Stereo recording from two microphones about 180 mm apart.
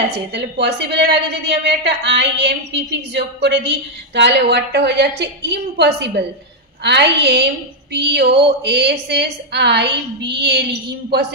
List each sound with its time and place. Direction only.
0.3 s a woman's voice: 70° right (ahead or behind)